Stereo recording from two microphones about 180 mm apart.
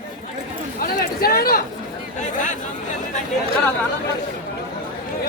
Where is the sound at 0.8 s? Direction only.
55° left (ahead or behind).